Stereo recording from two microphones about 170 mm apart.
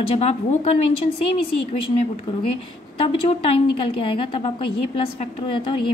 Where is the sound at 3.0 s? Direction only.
35° left (ahead or behind).